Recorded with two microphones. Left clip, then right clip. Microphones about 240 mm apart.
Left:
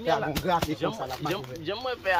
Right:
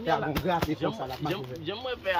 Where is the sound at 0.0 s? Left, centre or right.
Centre.